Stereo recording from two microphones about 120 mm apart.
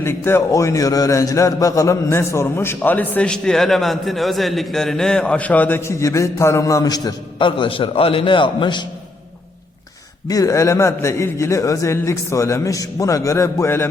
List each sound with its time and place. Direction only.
0.0 s a man's voice: 20° left (ahead or behind)
7.3 s a man's voice: 45° left (ahead or behind)
10.2 s a man's voice: 25° left (ahead or behind)